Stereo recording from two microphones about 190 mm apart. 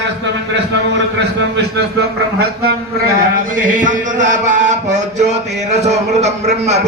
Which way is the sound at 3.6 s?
45° right (ahead or behind).